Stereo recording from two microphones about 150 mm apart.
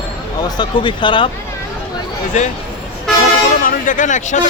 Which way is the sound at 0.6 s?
30° left (ahead or behind).